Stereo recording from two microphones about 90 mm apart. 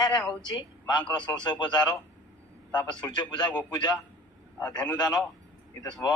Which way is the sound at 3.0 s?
50° left (ahead or behind).